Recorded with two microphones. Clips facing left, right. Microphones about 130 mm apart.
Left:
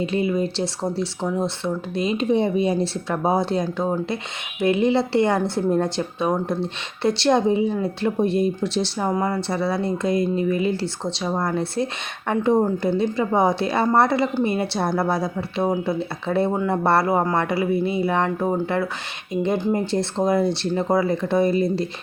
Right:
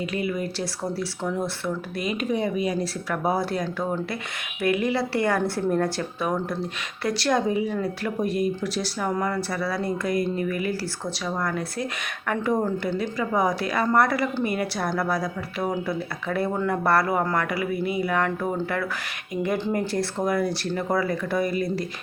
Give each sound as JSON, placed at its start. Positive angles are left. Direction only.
{"t": 0.0, "sound": "speech", "side_deg": 25}
{"t": 19.5, "sound": "speech", "side_deg": 15}
{"t": 19.8, "sound": "speech", "side_deg": 25}